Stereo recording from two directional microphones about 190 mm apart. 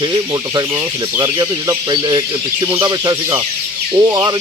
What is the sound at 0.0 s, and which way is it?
Speech, 20° right (ahead or behind).